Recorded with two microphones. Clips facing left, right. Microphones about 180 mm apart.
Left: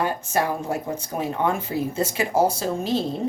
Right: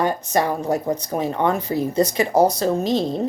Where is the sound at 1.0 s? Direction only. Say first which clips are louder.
Right 3 dB; 5° left (ahead or behind).